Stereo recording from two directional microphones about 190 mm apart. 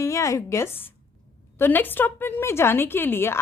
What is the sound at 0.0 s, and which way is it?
A woman's voice, 15° left (ahead or behind).